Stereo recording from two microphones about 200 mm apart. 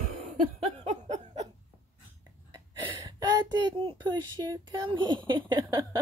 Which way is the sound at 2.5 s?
20° right (ahead or behind).